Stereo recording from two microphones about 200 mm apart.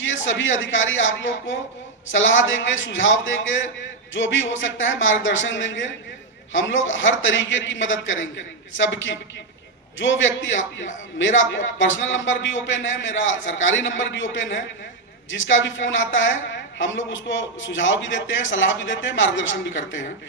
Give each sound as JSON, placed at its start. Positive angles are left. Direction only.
{"t": 0.0, "sound": "a woman's voice", "side_deg": 70}